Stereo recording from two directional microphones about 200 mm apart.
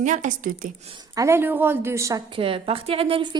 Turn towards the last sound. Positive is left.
turn(degrees=-25)  # may be behind; listen again after turning